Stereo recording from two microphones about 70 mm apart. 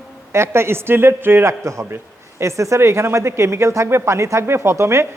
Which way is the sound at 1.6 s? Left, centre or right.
Right.